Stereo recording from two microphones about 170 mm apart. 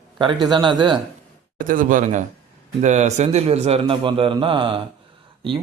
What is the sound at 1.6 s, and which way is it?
A man's voice, 50° right (ahead or behind).